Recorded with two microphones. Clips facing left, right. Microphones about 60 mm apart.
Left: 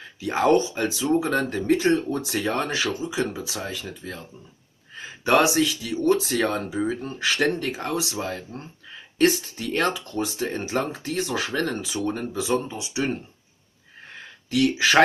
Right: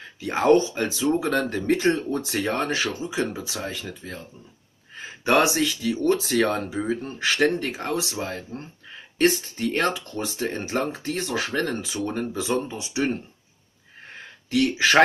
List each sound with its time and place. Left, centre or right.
0.2 s speech: right
5.2 s speech: right
9.7 s speech: right
14.5 s speech: right